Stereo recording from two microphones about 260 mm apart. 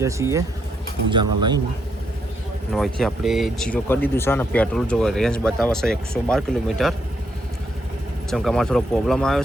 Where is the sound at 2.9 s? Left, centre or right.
Centre.